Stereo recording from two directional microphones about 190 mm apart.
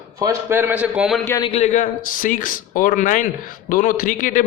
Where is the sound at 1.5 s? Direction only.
35° left (ahead or behind).